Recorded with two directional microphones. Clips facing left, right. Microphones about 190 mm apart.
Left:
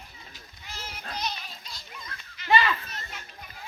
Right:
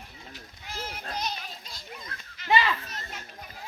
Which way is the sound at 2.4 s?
15° right (ahead or behind).